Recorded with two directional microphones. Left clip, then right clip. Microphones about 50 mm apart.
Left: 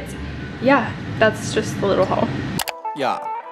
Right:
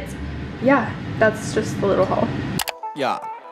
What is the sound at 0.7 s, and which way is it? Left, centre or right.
Speech, centre.